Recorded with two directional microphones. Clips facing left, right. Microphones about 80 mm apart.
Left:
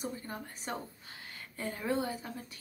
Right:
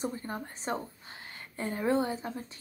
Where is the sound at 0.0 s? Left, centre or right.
Right.